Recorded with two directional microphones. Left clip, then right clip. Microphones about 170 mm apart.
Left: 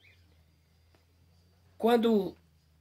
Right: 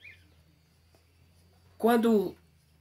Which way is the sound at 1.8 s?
25° left (ahead or behind).